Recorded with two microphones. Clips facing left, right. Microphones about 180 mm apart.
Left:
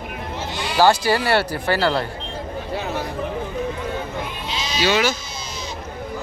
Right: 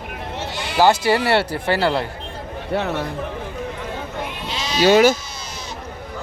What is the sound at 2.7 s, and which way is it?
Speech, 65° right (ahead or behind).